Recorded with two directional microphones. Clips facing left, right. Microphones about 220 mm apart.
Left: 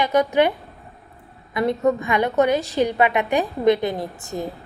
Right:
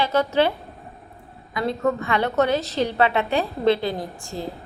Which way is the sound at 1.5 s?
20° left (ahead or behind).